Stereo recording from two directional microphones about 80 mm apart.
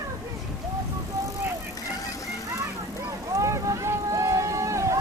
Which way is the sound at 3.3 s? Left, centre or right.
Right.